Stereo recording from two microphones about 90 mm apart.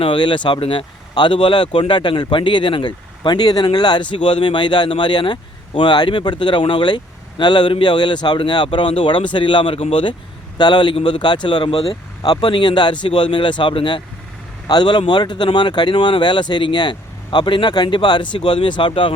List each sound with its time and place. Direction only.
0.0 s speech: 65° left (ahead or behind)
4.1 s speech: 65° left (ahead or behind); by 11.9 s 85° left
12.2 s speech: 55° left (ahead or behind)
14.7 s speech: 55° left (ahead or behind)